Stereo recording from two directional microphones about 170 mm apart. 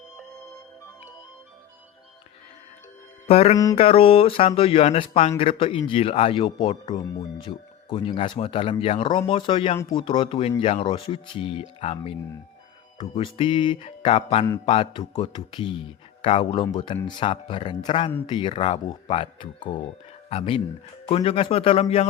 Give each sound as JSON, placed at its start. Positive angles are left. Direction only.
{"t": 3.2, "sound": "a man's voice", "side_deg": 40}